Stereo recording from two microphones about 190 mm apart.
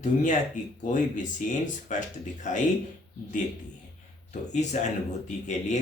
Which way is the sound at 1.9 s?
40° left (ahead or behind).